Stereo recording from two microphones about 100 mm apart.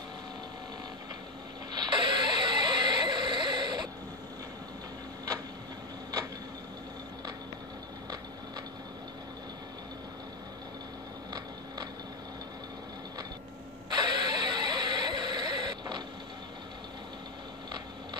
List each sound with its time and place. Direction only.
1.7 s music: 50° right (ahead or behind)
13.9 s music: 45° right (ahead or behind)